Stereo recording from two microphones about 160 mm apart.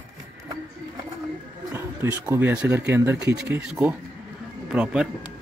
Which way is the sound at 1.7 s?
15° right (ahead or behind).